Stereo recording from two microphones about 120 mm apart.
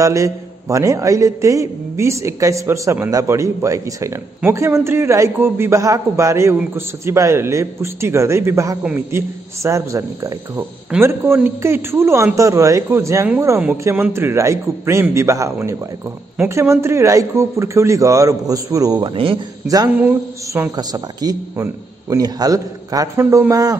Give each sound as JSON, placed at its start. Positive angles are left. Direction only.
{"t": 0.0, "sound": "a man's voice", "side_deg": -25}
{"t": 20.0, "sound": "speech", "side_deg": -15}
{"t": 20.7, "sound": "a man's voice", "side_deg": -30}